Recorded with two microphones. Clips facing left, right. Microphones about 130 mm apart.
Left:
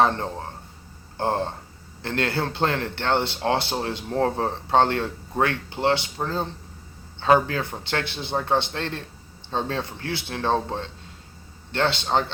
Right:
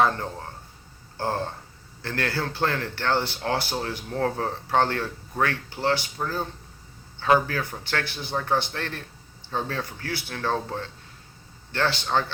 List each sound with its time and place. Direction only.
0.0 s speech: 25° left (ahead or behind)